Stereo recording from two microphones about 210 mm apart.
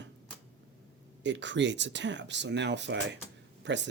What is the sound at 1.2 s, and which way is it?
Speech, 60° right (ahead or behind).